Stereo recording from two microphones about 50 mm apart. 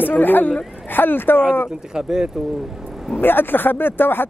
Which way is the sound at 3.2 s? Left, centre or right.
Left.